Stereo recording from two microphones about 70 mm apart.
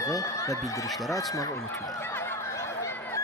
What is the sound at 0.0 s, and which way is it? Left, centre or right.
Speech, left.